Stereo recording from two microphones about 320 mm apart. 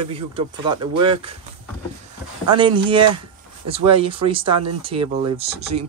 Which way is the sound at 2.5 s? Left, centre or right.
Centre.